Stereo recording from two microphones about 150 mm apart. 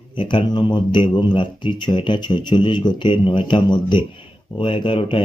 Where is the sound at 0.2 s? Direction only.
35° left (ahead or behind).